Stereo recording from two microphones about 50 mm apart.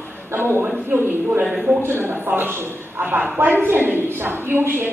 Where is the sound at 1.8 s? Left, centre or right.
Right.